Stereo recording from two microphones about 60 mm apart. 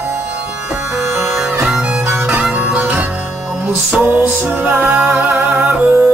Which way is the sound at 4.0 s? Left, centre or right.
Right.